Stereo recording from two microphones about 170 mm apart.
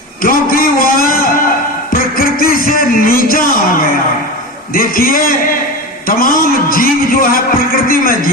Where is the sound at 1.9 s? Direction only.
60° left (ahead or behind).